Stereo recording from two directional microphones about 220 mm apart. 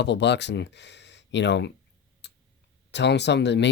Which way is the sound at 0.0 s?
50° left (ahead or behind).